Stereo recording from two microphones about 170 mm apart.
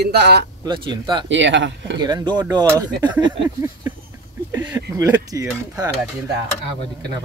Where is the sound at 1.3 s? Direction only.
90° right.